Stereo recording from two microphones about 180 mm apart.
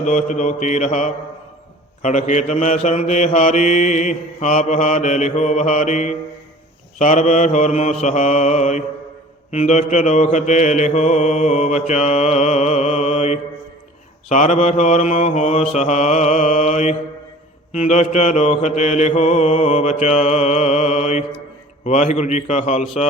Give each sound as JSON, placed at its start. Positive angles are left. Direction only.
{"t": 0.0, "sound": "mantra", "side_deg": 45}